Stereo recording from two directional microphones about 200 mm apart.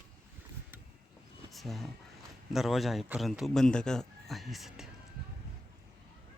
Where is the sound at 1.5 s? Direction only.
Centre (ahead or behind).